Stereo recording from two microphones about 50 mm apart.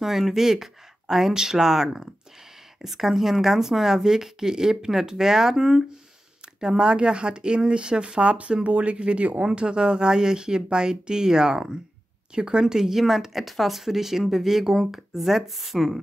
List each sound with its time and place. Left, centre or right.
0.0 s speech: centre
12.7 s speech: centre